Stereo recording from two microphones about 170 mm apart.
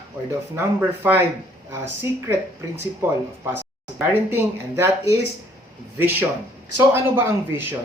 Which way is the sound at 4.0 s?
15° right (ahead or behind).